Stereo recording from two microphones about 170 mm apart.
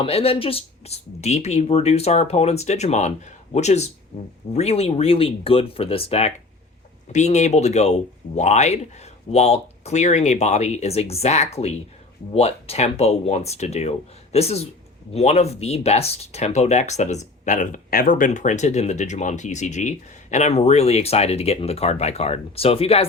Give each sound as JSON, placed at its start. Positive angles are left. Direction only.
{"t": 0.0, "sound": "speech", "side_deg": 35}